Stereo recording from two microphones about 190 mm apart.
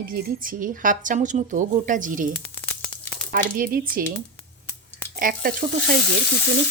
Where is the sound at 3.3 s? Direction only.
50° right (ahead or behind).